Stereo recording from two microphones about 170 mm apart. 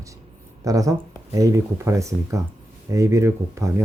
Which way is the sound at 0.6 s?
20° right (ahead or behind).